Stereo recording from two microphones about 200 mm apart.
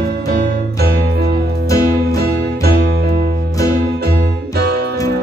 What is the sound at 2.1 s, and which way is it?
Music, 50° right (ahead or behind).